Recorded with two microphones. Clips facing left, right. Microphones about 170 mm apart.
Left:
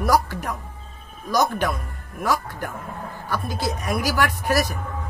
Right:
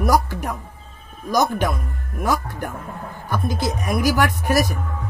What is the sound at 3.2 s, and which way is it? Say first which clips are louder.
A woman's voice: right 3 dB; 15° right (ahead or behind).